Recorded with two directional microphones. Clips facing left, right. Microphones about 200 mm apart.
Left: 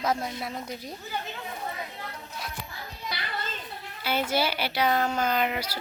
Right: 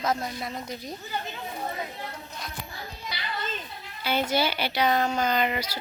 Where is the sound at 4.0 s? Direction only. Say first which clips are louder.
Right 1 dB; 5° left (ahead or behind).